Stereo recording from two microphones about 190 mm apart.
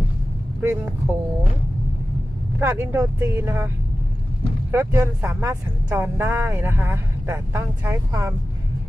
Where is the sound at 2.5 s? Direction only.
10° right (ahead or behind).